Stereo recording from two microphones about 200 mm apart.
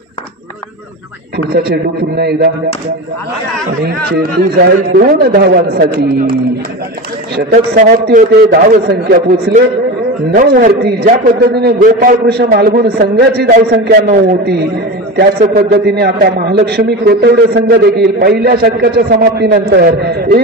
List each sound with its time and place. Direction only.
1.5 s a man's voice: 50° right (ahead or behind)
3.8 s a man's voice: 50° right (ahead or behind)
7.7 s a man's voice: 40° right (ahead or behind)
11.9 s a man's voice: 40° right (ahead or behind)
13.5 s a man's voice: 45° right (ahead or behind)
15.5 s a man's voice: 55° right (ahead or behind)